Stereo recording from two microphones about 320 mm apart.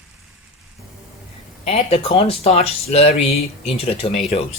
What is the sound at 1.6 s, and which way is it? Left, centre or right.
Speech, centre.